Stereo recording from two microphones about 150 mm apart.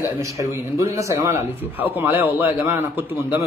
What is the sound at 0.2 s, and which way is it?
A man's voice, 20° right (ahead or behind).